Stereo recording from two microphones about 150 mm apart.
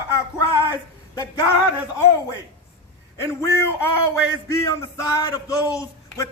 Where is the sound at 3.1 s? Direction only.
20° left (ahead or behind).